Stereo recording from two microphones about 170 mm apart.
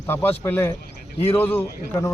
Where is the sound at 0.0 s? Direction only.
10° left (ahead or behind).